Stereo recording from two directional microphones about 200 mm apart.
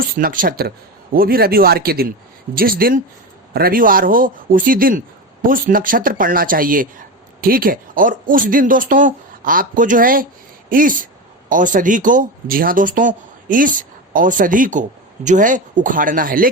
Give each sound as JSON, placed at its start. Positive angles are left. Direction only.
{"t": 0.2, "sound": "speech", "side_deg": -45}